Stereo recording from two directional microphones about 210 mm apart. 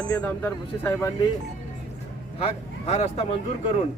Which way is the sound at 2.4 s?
30° left (ahead or behind).